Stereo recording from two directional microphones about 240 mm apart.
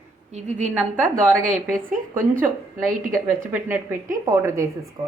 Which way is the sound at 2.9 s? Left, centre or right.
Right.